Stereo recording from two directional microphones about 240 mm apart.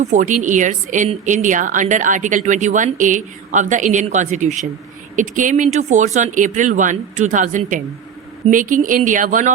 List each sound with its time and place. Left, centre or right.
0.0 s a woman's voice: right